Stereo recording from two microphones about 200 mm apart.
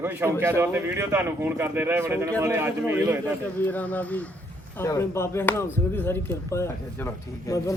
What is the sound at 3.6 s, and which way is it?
A man's voice, 10° left (ahead or behind).